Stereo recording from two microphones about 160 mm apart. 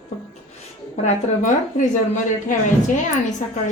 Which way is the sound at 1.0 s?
50° left (ahead or behind).